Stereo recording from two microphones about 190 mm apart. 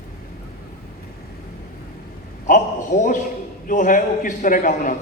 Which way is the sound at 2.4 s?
40° left (ahead or behind).